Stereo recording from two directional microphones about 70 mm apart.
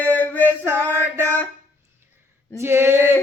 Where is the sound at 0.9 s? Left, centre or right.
Right.